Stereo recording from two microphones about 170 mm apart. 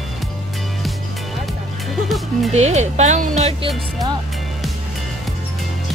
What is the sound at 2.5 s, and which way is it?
Speech, 40° right (ahead or behind).